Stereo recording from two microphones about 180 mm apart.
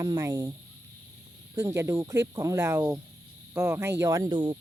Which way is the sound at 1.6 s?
15° right (ahead or behind).